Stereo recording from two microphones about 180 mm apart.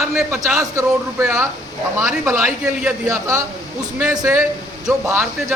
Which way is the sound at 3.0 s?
15° right (ahead or behind).